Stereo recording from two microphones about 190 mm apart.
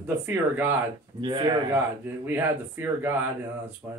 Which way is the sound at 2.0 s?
10° right (ahead or behind).